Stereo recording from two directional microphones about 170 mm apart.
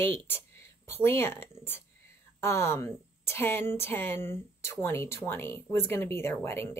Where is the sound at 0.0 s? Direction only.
10° left (ahead or behind).